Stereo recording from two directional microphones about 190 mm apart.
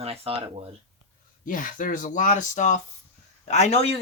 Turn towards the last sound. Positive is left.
turn(degrees=35)  # may be behind; listen again after turning